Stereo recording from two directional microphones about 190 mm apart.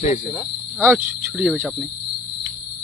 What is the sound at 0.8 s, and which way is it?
Speech, 10° right (ahead or behind).